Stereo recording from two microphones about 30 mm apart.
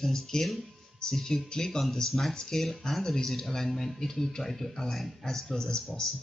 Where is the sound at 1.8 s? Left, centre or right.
Centre.